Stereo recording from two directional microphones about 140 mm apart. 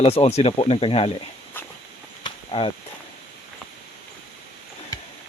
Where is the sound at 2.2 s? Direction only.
35° left (ahead or behind).